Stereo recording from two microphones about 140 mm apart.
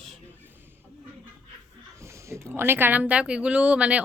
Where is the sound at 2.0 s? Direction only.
20° right (ahead or behind).